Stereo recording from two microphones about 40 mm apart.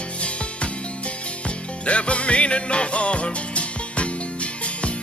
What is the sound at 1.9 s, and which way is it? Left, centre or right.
Music, left.